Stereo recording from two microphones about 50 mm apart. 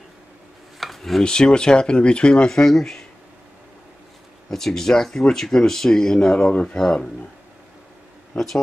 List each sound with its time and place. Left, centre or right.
0.7 s a sound: centre
1.2 s speech: centre
4.5 s speech: centre